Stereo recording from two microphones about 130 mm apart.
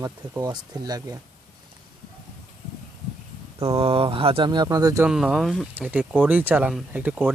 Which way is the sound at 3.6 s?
50° right (ahead or behind).